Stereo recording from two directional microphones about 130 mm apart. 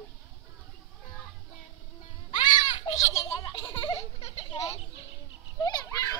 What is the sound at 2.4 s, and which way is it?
Children playing, 35° left (ahead or behind).